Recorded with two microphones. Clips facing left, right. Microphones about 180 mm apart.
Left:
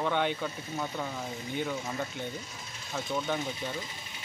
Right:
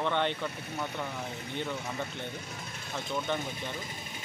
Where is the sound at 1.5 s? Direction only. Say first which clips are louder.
Left 2 dB; 5° left (ahead or behind).